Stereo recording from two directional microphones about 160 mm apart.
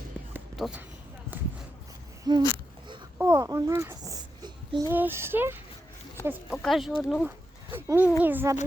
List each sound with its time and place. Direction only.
0.5 s speech: centre (ahead or behind)
2.3 s speech: 25° right (ahead or behind)
3.2 s a sound: 20° right (ahead or behind)
4.9 s speech: 15° right (ahead or behind)
6.5 s speech: centre (ahead or behind)
7.9 s speech: 10° right (ahead or behind)